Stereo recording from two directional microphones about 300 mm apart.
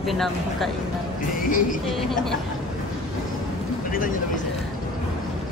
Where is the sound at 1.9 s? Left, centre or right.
Centre.